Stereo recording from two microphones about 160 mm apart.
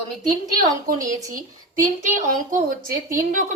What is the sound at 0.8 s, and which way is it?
A woman's voice, 60° right (ahead or behind).